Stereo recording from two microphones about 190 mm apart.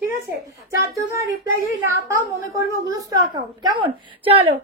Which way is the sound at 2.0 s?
15° right (ahead or behind).